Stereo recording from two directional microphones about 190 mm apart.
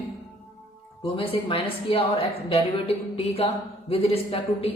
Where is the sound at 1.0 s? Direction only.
30° left (ahead or behind).